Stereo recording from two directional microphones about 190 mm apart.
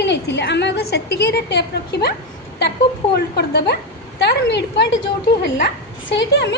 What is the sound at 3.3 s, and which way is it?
A woman's voice, 60° left (ahead or behind).